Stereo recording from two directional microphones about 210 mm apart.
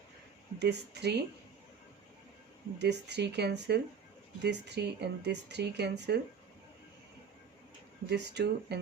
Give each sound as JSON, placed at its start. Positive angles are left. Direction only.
{"t": 0.6, "sound": "speech", "side_deg": -55}
{"t": 2.7, "sound": "speech", "side_deg": -55}
{"t": 8.1, "sound": "speech", "side_deg": -55}